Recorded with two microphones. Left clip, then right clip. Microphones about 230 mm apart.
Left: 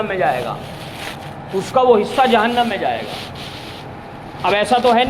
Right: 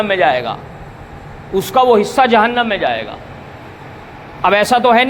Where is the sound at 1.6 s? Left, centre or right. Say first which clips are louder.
Right 2 dB; right.